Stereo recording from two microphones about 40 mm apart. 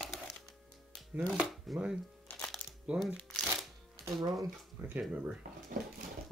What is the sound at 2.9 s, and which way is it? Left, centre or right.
Speech, right.